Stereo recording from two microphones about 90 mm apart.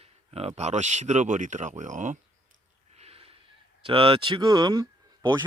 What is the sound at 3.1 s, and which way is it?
Snort, 90° right.